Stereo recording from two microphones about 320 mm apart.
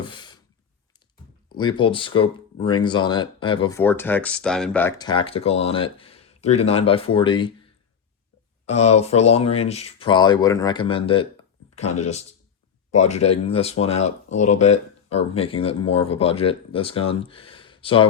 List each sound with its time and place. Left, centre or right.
0.0 s a sound: centre
1.5 s speech: centre
8.7 s speech: left
9.0 s speech: centre